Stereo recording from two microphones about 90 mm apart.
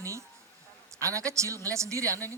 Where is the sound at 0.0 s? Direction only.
35° right (ahead or behind).